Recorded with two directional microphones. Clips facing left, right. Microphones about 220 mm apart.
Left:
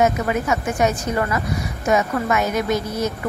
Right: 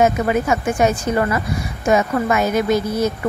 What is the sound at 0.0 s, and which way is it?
A woman's voice, 30° right (ahead or behind).